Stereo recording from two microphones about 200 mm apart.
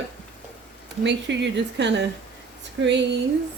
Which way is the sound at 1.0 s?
60° right (ahead or behind).